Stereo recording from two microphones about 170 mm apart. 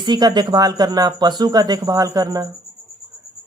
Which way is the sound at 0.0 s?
25° right (ahead or behind).